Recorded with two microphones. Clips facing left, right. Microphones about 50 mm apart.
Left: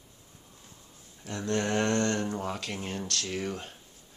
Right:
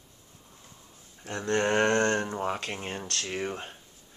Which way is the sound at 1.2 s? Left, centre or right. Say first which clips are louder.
Right 3 dB; right.